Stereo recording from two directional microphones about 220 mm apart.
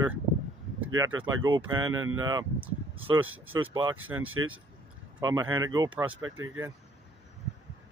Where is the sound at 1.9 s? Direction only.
70° right (ahead or behind).